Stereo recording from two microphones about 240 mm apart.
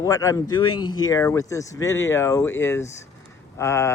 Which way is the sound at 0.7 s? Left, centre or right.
Left.